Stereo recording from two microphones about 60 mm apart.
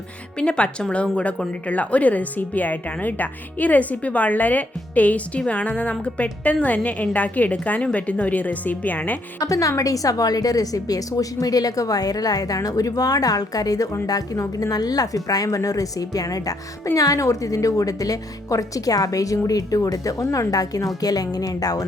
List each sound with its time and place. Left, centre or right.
0.3 s a woman's voice: centre
9.4 s a woman's voice: left